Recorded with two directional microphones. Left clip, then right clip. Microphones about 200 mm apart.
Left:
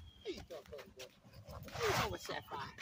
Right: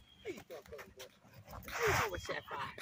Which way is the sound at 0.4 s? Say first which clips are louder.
Even; 10° left (ahead or behind).